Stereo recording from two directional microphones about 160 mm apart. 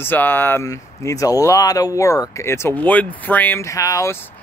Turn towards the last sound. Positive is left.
turn(degrees=20)  # may be behind; listen again after turning